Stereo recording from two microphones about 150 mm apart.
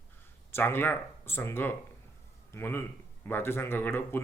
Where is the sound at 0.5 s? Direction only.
15° left (ahead or behind).